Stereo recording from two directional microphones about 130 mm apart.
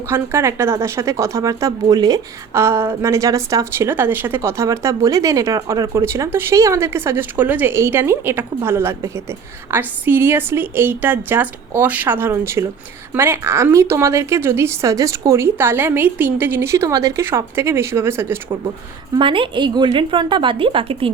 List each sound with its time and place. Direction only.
0.1 s a woman's voice: 20° right (ahead or behind)
19.1 s a woman's voice: 40° right (ahead or behind)